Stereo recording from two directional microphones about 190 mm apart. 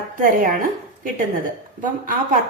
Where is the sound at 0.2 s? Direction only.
45° right (ahead or behind).